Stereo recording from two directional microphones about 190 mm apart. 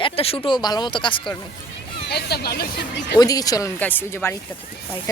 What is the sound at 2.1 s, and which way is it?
Speech, 55° left (ahead or behind).